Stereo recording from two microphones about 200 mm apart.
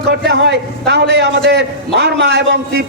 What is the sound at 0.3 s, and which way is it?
A man's voice, 60° right (ahead or behind).